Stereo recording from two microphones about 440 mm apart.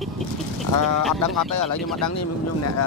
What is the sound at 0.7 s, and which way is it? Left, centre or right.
Speech, left.